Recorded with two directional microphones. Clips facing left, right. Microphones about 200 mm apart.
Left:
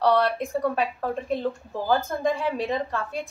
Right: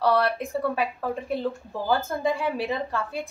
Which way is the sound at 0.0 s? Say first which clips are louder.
Left 1 dB; centre (ahead or behind).